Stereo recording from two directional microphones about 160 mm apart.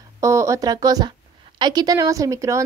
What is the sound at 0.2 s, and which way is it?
A woman's voice, 20° right (ahead or behind).